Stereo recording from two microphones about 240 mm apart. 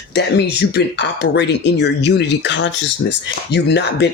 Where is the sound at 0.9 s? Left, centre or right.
Left.